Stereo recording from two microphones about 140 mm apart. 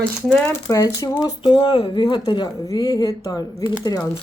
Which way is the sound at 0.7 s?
20° left (ahead or behind).